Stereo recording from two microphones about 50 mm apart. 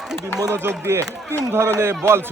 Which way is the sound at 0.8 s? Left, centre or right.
Right.